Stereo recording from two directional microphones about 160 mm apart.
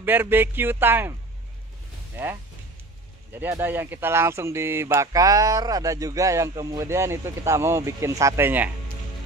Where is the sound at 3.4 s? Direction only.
15° right (ahead or behind).